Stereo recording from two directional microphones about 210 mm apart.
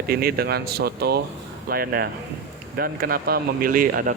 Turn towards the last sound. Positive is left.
turn(degrees=-40)  # may be behind; listen again after turning